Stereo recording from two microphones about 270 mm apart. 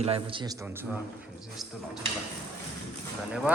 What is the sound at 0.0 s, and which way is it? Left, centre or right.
Speech, right.